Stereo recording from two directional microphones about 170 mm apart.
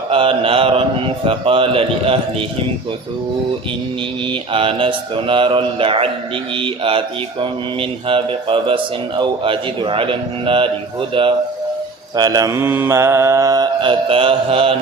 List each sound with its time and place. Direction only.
0.1 s a man's voice: 30° right (ahead or behind)
4.3 s speech: 30° right (ahead or behind)
12.1 s mantra: 25° right (ahead or behind)